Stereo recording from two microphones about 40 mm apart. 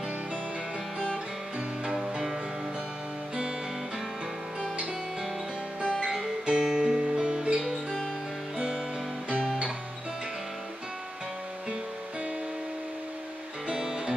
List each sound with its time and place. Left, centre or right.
1.9 s music: centre
5.9 s music: centre
13.7 s music: centre